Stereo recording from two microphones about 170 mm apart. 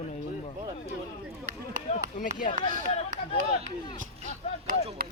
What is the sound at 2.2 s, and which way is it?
Speech, 50° left (ahead or behind).